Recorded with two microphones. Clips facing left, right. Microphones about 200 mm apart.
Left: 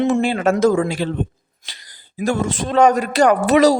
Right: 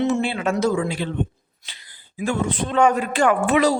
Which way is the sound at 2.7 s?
40° left (ahead or behind).